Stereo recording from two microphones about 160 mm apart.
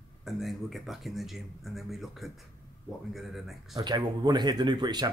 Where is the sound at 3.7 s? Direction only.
25° right (ahead or behind).